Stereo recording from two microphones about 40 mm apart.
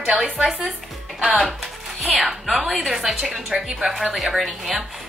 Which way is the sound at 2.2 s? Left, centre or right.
Centre.